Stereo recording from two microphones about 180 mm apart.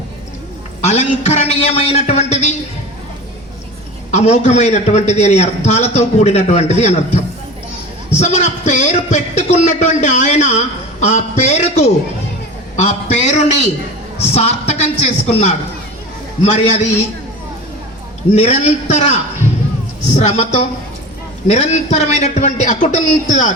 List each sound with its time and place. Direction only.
0.8 s a man's voice: 40° left (ahead or behind)
4.1 s a man's voice: 40° left (ahead or behind)
18.3 s a man's voice: 40° left (ahead or behind)
20.1 s a man's voice: 35° left (ahead or behind)